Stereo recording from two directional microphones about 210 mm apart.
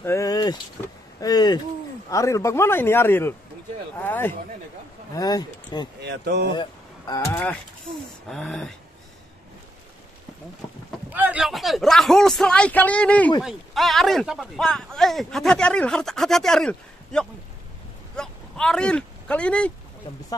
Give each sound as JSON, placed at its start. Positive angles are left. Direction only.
{"t": 0.0, "sound": "vehicle", "side_deg": 15}
{"t": 1.2, "sound": "a man's voice", "side_deg": 20}
{"t": 5.9, "sound": "speech", "side_deg": -55}
{"t": 6.5, "sound": "speech", "side_deg": 20}
{"t": 11.1, "sound": "speech", "side_deg": -10}